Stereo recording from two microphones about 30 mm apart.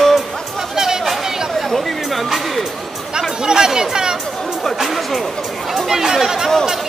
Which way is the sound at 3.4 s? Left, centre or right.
Right.